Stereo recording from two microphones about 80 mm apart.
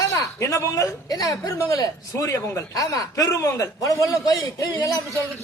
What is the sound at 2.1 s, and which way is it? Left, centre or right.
A man's voice, left.